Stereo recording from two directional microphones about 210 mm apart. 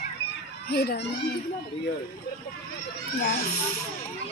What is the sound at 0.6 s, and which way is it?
Speech, 45° left (ahead or behind).